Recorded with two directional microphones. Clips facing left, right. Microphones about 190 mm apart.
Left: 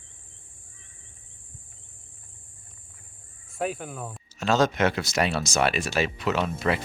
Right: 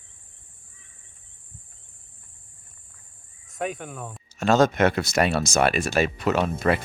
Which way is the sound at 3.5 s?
5° left (ahead or behind).